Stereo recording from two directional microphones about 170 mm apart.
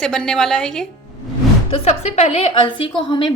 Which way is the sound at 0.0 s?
5° left (ahead or behind).